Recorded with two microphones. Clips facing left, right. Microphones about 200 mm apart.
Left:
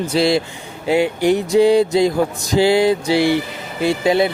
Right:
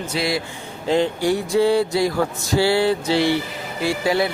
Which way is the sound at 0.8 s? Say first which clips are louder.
Left 3 dB; 10° left (ahead or behind).